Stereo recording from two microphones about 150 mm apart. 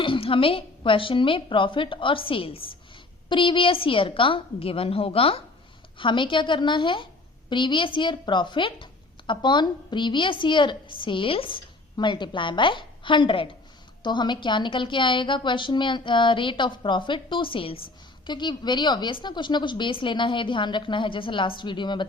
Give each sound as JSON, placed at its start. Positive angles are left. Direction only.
{"t": 0.0, "sound": "a woman's voice", "side_deg": 35}